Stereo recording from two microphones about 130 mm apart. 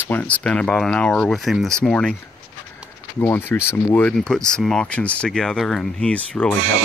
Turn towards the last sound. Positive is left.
turn(degrees=10)  # may be behind; listen again after turning